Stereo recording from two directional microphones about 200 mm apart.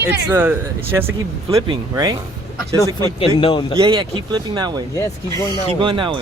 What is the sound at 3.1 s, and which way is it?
Speech, 25° left (ahead or behind).